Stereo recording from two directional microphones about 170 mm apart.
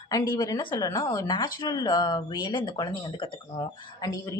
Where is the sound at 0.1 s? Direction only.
20° left (ahead or behind).